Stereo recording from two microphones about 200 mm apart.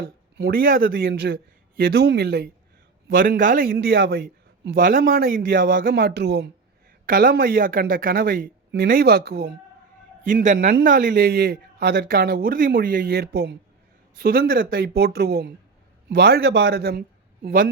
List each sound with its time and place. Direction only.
0.3 s a man's voice: 50° right (ahead or behind)
7.0 s a man's voice: 45° right (ahead or behind)
10.2 s a man's voice: 40° right (ahead or behind)